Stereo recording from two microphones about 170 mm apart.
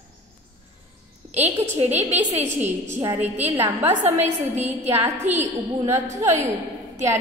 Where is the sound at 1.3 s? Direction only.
40° right (ahead or behind).